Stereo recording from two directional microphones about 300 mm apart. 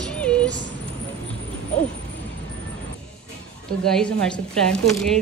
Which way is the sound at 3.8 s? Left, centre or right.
Centre.